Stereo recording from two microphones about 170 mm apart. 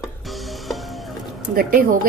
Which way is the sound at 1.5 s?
60° right (ahead or behind).